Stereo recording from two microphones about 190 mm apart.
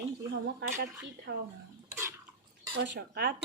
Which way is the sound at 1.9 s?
15° right (ahead or behind).